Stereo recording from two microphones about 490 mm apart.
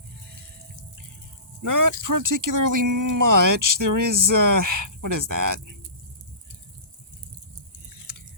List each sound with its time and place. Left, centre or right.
1.6 s speech: right